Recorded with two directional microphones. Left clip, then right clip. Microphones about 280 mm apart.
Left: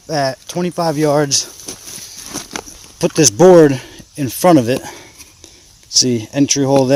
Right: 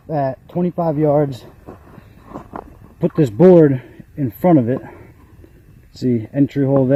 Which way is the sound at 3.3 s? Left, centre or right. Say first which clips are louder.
Left 3 dB; left.